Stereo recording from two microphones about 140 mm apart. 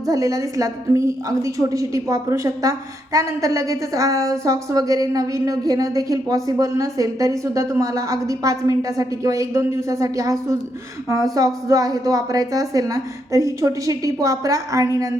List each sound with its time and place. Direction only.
0.1 s a woman's voice: 25° right (ahead or behind)